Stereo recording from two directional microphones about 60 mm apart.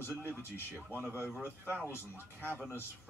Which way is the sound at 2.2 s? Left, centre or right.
Right.